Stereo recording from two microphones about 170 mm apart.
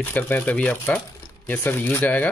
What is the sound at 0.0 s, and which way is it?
Speech, 10° left (ahead or behind).